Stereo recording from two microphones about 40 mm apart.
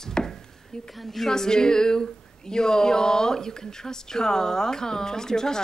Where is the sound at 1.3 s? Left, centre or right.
Centre.